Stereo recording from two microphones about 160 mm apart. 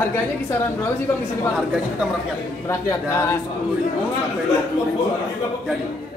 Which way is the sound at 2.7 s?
15° left (ahead or behind).